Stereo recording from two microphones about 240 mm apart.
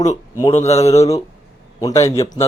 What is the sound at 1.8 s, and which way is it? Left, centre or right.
Speech, centre.